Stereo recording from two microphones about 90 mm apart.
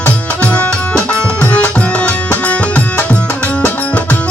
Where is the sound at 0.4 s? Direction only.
15° left (ahead or behind).